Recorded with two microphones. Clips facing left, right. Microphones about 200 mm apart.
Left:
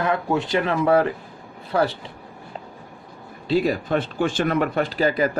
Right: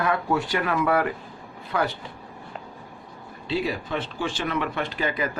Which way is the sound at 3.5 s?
45° left (ahead or behind).